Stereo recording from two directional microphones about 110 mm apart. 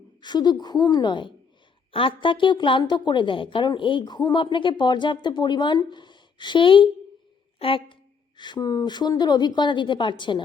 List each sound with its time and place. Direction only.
0.2 s a woman's voice: 40° left (ahead or behind)
8.4 s a woman's voice: 45° left (ahead or behind)